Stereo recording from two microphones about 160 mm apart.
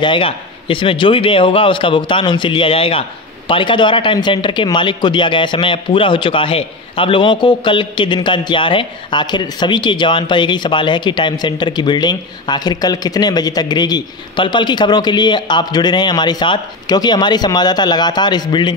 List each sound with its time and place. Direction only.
0.0 s a man's voice: 30° left (ahead or behind)